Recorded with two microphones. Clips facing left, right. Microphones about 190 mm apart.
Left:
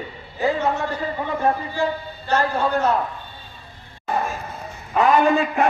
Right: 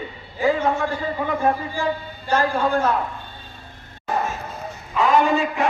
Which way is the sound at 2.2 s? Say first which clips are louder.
Right 1 dB; 10° right (ahead or behind).